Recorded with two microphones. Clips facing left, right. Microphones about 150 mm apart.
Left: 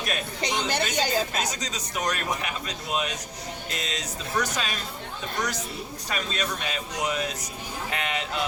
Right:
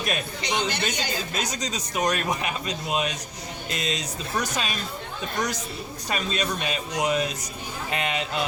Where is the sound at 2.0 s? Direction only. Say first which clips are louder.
Right 4 dB; 15° right (ahead or behind).